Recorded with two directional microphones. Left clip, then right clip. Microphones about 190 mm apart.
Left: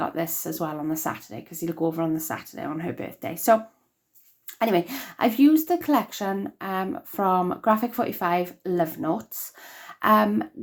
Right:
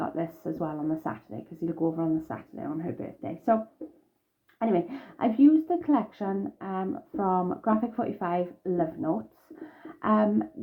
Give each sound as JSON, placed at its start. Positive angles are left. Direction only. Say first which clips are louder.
{"t": 0.0, "sound": "speech", "louder": "left 4 dB", "side_deg": 15}
{"t": 4.6, "sound": "speech", "louder": "left 4 dB", "side_deg": 20}